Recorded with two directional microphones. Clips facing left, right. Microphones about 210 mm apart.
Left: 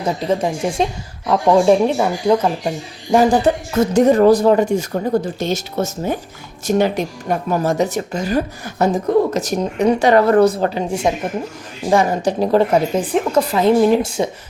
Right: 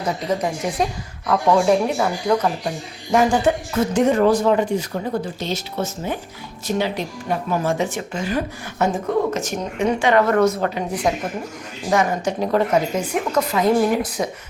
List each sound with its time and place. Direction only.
0.3 s speech: 25° left (ahead or behind)